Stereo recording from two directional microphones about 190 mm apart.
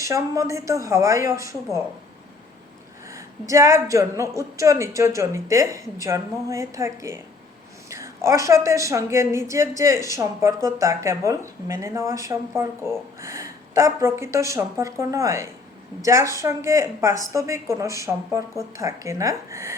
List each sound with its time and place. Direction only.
0.0 s a woman's voice: 15° right (ahead or behind)
3.1 s a woman's voice: 15° right (ahead or behind)